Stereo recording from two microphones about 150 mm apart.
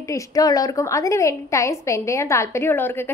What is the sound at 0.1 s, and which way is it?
A woman's voice, 25° left (ahead or behind).